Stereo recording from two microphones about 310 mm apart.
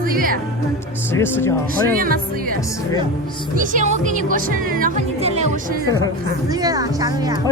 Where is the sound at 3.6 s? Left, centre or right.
Right.